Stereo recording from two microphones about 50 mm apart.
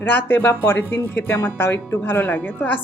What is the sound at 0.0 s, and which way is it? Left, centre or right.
Speech, left.